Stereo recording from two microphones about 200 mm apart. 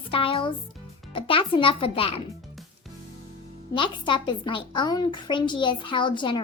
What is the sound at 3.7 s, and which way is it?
A child's voice, 25° left (ahead or behind).